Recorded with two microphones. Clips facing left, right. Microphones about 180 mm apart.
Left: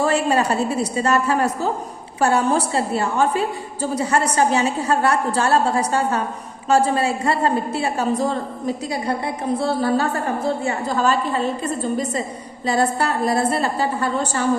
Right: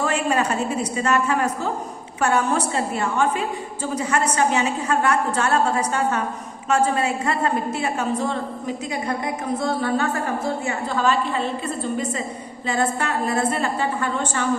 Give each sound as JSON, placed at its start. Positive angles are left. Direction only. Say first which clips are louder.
{"t": 0.0, "sound": "a woman's voice", "louder": "left 3 dB", "side_deg": 35}
{"t": 12.6, "sound": "a woman's voice", "louder": "left 3 dB", "side_deg": 35}